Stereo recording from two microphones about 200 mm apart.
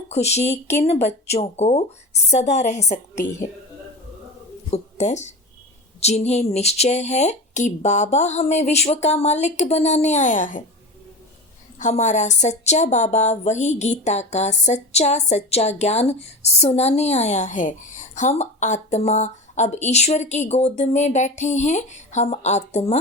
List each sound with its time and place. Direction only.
0.1 s a woman's voice: 35° left (ahead or behind)
4.7 s a woman's voice: 35° left (ahead or behind)
11.8 s a woman's voice: 35° left (ahead or behind)